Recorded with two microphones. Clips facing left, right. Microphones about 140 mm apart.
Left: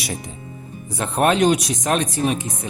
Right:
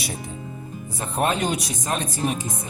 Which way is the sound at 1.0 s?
75° left (ahead or behind).